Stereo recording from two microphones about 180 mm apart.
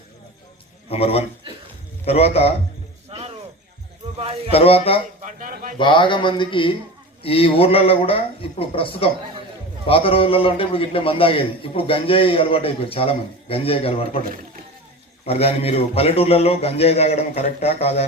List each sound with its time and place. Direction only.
0.9 s a man's voice: 35° left (ahead or behind)
1.5 s a sound: 30° right (ahead or behind)
2.0 s a man's voice: 35° left (ahead or behind)
3.1 s snake: 35° right (ahead or behind)
4.2 s a sound: 30° right (ahead or behind)
4.5 s a man's voice: 35° left (ahead or behind)
5.2 s a man's voice: 45° right (ahead or behind)
5.7 s a man's voice: 25° left (ahead or behind)
15.2 s a man's voice: 35° left (ahead or behind)